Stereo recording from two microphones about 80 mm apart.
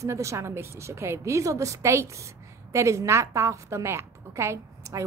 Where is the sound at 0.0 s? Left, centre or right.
Right.